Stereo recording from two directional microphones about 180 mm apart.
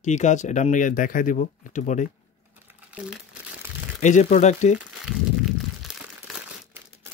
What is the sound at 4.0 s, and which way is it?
Speech, 40° left (ahead or behind).